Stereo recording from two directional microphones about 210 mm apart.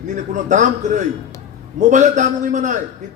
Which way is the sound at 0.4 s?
35° right (ahead or behind).